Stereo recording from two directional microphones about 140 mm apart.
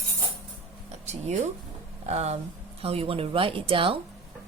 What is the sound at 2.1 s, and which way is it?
A woman's voice, 50° right (ahead or behind).